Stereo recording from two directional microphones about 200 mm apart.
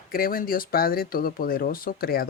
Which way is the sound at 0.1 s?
45° left (ahead or behind).